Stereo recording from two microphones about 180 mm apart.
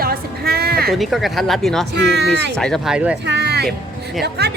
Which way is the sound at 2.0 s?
70° right (ahead or behind).